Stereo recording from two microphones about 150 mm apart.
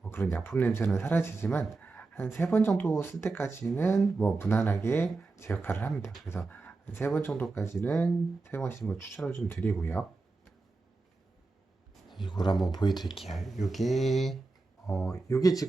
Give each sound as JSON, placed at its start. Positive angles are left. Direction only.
{"t": 0.0, "sound": "speech", "side_deg": 15}
{"t": 12.2, "sound": "speech", "side_deg": 30}
{"t": 13.3, "sound": "speech", "side_deg": 0}
{"t": 15.1, "sound": "speech", "side_deg": 20}